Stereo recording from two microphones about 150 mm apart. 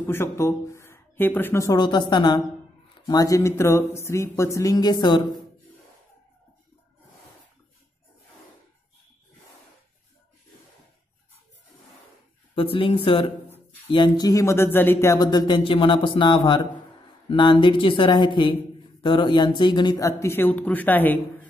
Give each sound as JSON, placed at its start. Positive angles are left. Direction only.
{"t": 0.0, "sound": "speech", "side_deg": 15}
{"t": 12.5, "sound": "speech", "side_deg": 40}